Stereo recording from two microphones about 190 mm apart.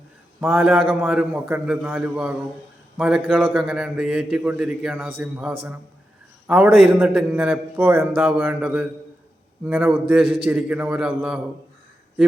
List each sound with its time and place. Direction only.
0.3 s a man's voice: 5° right (ahead or behind)